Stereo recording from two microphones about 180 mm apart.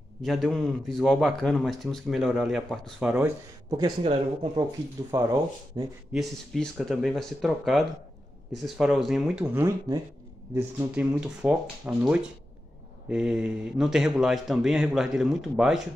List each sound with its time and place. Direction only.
0.2 s a man's voice: centre (ahead or behind)
3.7 s speech: 25° right (ahead or behind)
6.1 s a man's voice: centre (ahead or behind)